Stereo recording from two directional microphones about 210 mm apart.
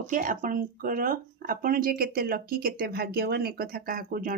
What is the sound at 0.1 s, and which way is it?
Speech, 40° right (ahead or behind).